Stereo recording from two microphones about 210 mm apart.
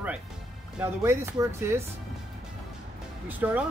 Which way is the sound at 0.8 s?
15° right (ahead or behind).